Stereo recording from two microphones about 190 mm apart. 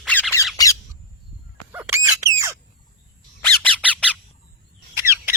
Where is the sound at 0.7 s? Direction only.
15° left (ahead or behind).